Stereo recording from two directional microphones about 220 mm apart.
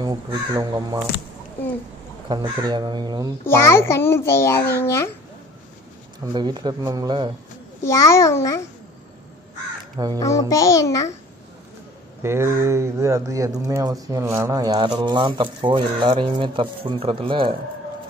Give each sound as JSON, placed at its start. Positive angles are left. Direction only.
{"t": 0.0, "sound": "speech", "side_deg": -15}
{"t": 2.2, "sound": "speech", "side_deg": -20}
{"t": 3.4, "sound": "a child's voice", "side_deg": 10}
{"t": 6.3, "sound": "speech", "side_deg": -20}
{"t": 7.8, "sound": "a child's voice", "side_deg": 15}
{"t": 10.1, "sound": "a child's voice", "side_deg": 15}
{"t": 12.2, "sound": "speech", "side_deg": -10}